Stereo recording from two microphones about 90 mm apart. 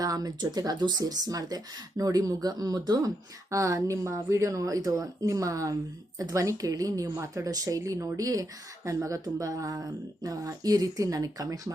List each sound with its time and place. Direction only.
0.0 s a woman's voice: 45° right (ahead or behind)